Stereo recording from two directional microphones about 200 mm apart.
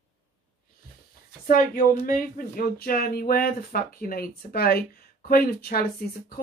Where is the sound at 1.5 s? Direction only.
40° left (ahead or behind).